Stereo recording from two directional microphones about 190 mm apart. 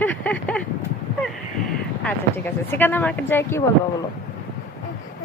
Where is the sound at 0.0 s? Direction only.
10° left (ahead or behind).